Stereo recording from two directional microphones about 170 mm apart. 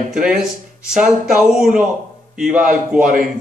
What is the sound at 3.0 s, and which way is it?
Speech, 55° right (ahead or behind).